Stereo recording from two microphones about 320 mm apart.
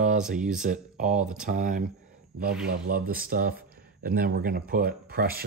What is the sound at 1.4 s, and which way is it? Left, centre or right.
Speech, right.